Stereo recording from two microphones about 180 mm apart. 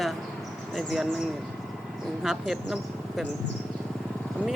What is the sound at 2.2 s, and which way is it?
A woman's voice, 5° right (ahead or behind).